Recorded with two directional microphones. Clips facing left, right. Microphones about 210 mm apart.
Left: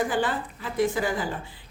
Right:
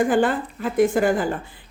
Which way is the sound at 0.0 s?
50° right (ahead or behind).